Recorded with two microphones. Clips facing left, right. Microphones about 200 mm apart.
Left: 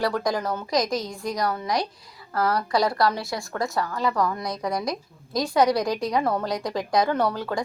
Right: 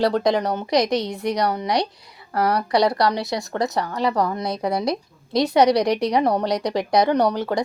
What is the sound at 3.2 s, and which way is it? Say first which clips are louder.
A woman's voice: right 4 dB; 20° right (ahead or behind).